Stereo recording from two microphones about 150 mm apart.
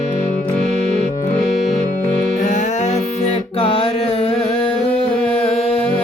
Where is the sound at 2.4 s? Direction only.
55° left (ahead or behind).